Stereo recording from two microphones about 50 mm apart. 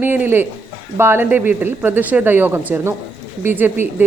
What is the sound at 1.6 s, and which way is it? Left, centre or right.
A woman's voice, right.